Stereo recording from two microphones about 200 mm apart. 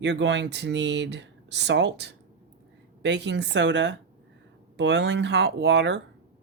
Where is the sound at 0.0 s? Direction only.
60° right (ahead or behind).